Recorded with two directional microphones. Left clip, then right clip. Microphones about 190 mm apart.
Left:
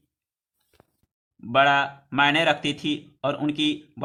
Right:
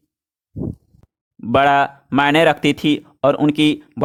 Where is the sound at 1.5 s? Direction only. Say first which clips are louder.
Right 5 dB; 50° right (ahead or behind).